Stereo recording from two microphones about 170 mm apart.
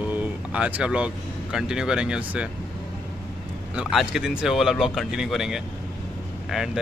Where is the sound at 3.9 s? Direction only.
5° right (ahead or behind).